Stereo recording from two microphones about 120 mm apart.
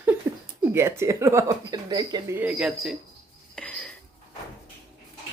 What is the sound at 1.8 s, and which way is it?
Speech, 35° right (ahead or behind).